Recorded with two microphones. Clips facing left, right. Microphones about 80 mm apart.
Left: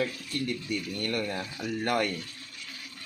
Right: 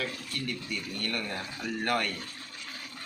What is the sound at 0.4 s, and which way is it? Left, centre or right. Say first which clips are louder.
Speech: left 4 dB; left.